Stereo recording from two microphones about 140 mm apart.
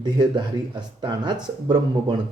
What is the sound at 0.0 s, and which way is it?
Speech, 30° right (ahead or behind).